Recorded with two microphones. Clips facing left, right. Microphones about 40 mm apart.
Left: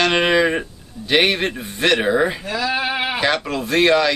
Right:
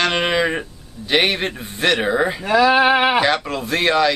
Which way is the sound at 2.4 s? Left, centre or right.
Right.